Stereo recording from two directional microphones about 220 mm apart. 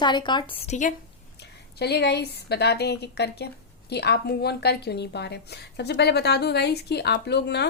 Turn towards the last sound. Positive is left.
turn(degrees=50)  # may be behind; listen again after turning